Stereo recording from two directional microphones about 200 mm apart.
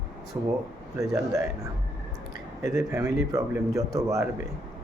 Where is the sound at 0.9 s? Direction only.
15° right (ahead or behind).